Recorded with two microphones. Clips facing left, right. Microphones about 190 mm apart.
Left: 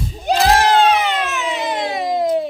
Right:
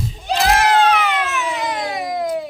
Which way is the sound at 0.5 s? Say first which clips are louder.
Even; 30° left (ahead or behind).